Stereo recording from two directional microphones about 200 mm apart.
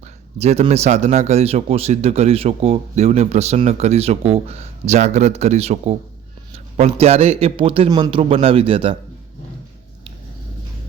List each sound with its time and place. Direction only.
0.3 s a man's voice: 30° right (ahead or behind)